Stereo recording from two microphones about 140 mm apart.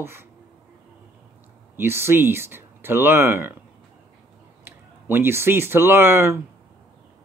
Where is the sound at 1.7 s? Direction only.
15° right (ahead or behind).